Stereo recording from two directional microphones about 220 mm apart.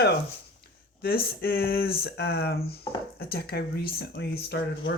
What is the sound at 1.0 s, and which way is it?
Speech, 45° left (ahead or behind).